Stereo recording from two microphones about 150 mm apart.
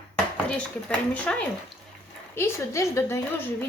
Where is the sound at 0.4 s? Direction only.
5° left (ahead or behind).